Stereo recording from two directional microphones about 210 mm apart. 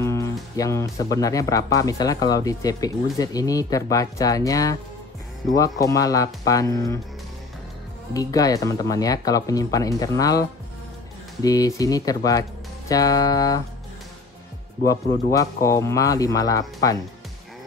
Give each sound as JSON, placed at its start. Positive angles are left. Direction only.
{"t": 0.0, "sound": "music", "side_deg": 15}
{"t": 1.1, "sound": "speech", "side_deg": 15}
{"t": 8.1, "sound": "speech", "side_deg": 15}
{"t": 11.4, "sound": "speech", "side_deg": 15}
{"t": 15.3, "sound": "speech", "side_deg": 15}